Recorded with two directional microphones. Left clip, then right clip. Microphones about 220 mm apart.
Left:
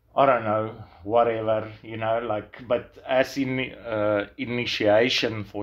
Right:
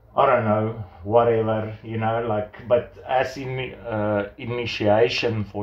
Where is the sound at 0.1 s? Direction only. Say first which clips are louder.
Right 2 dB; 35° left (ahead or behind).